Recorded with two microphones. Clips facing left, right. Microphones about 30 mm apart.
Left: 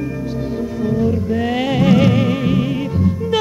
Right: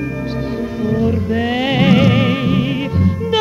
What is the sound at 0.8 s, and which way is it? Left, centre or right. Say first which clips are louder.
Music: right 1 dB; right.